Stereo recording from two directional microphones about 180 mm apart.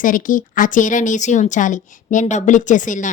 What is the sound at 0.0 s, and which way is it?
A woman's voice, 45° left (ahead or behind).